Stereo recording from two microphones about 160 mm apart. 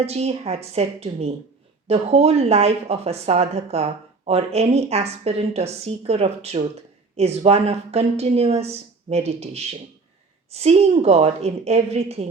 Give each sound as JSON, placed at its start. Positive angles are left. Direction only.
{"t": 0.0, "sound": "a woman's voice", "side_deg": -40}